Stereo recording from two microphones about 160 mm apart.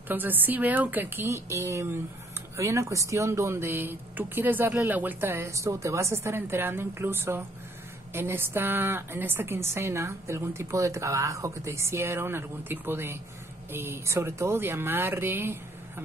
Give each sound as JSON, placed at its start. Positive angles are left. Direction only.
{"t": 0.1, "sound": "a woman's voice", "side_deg": -10}